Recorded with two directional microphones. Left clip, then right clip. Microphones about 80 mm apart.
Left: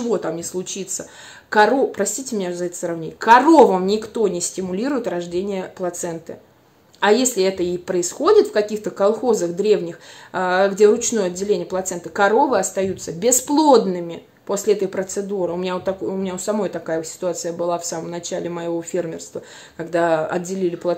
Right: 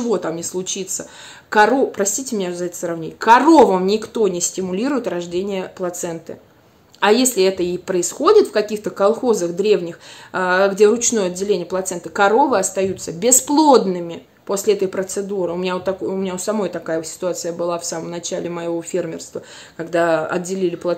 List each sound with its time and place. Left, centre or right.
0.0 s speech: right